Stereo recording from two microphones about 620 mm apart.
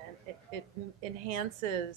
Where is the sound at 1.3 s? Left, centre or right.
Right.